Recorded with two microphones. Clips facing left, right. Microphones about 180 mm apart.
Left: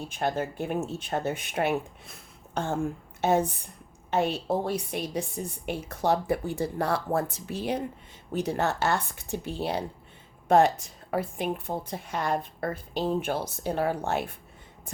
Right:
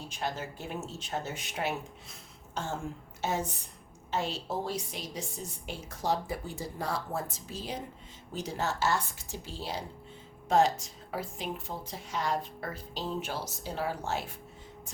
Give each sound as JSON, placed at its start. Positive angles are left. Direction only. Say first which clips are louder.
{"t": 0.1, "sound": "a woman's voice", "louder": "left 7 dB", "side_deg": 55}